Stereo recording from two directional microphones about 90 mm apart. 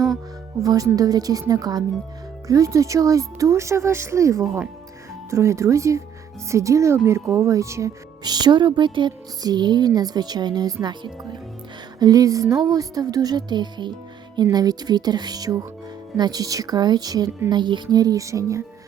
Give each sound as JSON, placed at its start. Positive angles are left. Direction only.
{"t": 0.6, "sound": "speech", "side_deg": -45}
{"t": 8.2, "sound": "speech", "side_deg": -50}
{"t": 10.8, "sound": "music", "side_deg": -55}
{"t": 11.9, "sound": "speech", "side_deg": -45}
{"t": 17.5, "sound": "music", "side_deg": -60}
{"t": 18.0, "sound": "speech", "side_deg": -40}